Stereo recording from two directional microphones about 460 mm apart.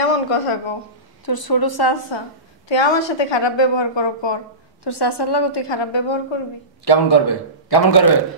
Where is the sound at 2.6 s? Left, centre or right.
Left.